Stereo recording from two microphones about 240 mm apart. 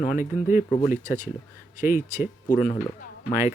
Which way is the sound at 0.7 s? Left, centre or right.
Left.